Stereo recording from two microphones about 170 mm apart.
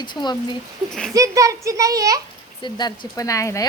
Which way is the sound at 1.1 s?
20° right (ahead or behind).